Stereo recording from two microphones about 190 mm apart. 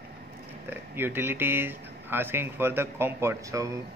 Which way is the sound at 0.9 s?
10° right (ahead or behind).